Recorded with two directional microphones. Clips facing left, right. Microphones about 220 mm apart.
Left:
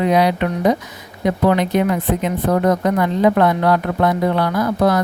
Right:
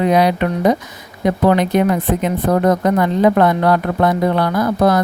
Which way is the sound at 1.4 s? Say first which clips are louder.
Right 2 dB; 45° right (ahead or behind).